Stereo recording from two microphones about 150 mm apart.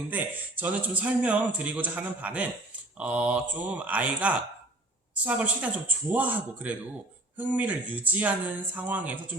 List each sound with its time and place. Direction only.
0.1 s speech: 10° right (ahead or behind)